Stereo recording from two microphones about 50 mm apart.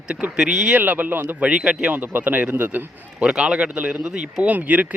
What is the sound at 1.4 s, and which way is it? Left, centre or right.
Speech, right.